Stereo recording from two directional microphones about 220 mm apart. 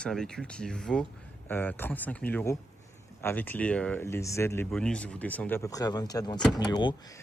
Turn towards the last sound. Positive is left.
turn(degrees=20)  # may be behind; listen again after turning